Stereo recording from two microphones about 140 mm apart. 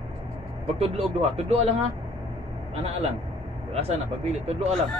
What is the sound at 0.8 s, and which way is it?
Speech, 45° right (ahead or behind).